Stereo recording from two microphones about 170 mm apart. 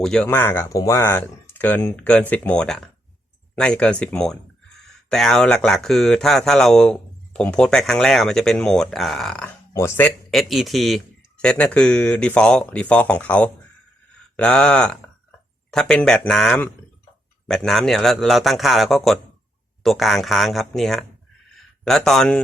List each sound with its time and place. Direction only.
0.0 s speech: 5° left (ahead or behind)
9.7 s speech: 15° left (ahead or behind)
10.3 s speech: centre (ahead or behind)
21.5 s a sound: centre (ahead or behind)